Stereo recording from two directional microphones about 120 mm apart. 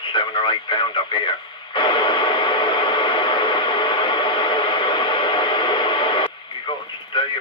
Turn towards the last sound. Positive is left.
turn(degrees=45)  # may be behind; listen again after turning